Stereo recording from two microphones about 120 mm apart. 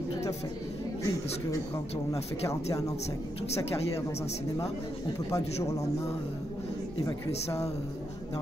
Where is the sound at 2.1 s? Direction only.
30° left (ahead or behind).